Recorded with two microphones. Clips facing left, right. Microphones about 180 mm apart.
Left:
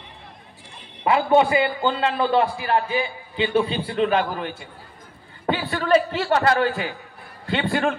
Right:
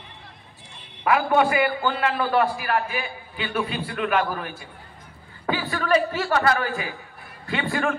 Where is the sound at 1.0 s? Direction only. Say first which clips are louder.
Left 2 dB; 25° left (ahead or behind).